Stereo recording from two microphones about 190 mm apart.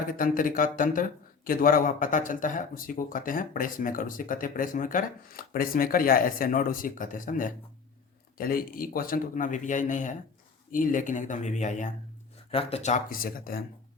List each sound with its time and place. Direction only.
0.1 s speech: 45° left (ahead or behind)